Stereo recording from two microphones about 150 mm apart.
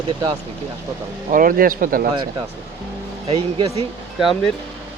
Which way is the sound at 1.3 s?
70° right (ahead or behind).